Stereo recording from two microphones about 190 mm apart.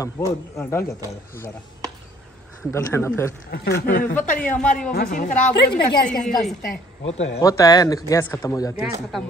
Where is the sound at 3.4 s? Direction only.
55° left (ahead or behind).